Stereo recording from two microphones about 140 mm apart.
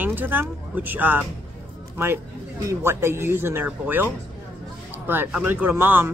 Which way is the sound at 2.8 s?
20° right (ahead or behind).